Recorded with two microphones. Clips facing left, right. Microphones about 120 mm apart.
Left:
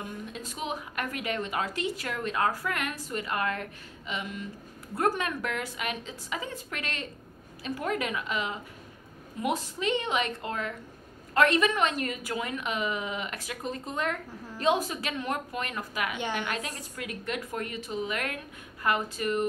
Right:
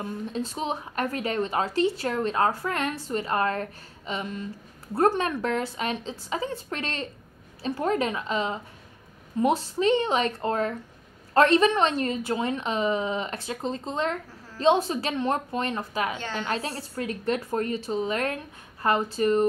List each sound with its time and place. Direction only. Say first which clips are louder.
0.0 s a woman's voice: right 7 dB; 35° right (ahead or behind)
16.2 s a woman's voice: left 1 dB; 15° left (ahead or behind)
16.4 s a woman's voice: right 5 dB; 35° right (ahead or behind)